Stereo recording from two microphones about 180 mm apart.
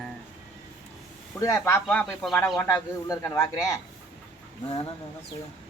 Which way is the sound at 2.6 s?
15° left (ahead or behind).